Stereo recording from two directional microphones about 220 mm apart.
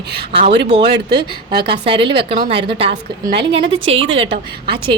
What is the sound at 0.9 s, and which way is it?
Speech, 50° right (ahead or behind).